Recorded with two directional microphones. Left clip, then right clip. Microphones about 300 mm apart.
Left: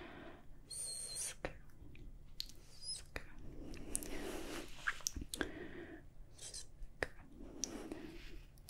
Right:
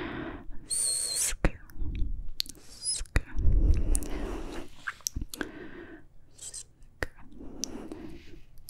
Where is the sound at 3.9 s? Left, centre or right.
Right.